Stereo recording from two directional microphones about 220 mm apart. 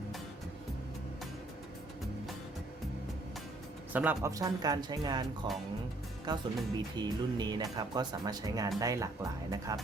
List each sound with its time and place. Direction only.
3.9 s speech: 10° right (ahead or behind)